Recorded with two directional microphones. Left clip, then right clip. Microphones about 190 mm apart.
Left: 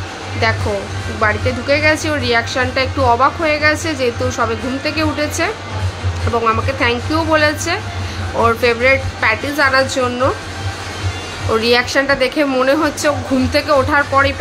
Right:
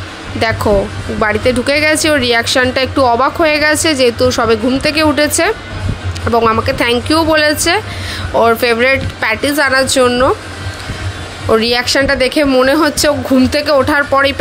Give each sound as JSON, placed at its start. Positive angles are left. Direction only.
{"t": 0.4, "sound": "a woman's voice", "side_deg": -40}
{"t": 11.5, "sound": "a woman's voice", "side_deg": -30}